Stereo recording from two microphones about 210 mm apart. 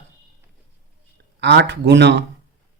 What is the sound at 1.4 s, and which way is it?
Speech, 55° right (ahead or behind).